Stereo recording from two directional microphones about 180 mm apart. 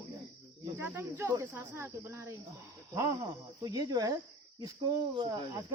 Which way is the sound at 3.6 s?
20° right (ahead or behind).